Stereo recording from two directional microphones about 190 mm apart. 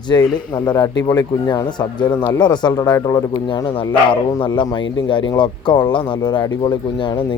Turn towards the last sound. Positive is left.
turn(degrees=25)  # may be behind; listen again after turning